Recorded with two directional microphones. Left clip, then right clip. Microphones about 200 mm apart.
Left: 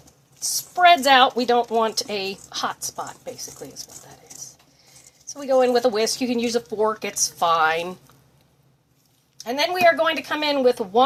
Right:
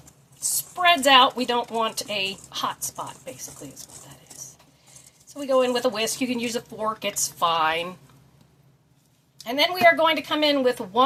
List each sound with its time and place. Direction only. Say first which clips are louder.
0.4 s speech: left 5 dB; 40° left (ahead or behind)
5.4 s speech: left 3 dB; 40° left (ahead or behind)
9.5 s speech: even; 30° left (ahead or behind)